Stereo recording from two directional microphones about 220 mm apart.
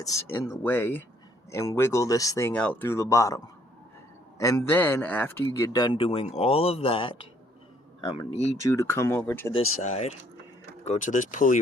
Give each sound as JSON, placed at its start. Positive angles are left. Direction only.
{"t": 0.0, "sound": "speech", "side_deg": 15}
{"t": 8.6, "sound": "speech", "side_deg": 15}
{"t": 9.8, "sound": "speech", "side_deg": 30}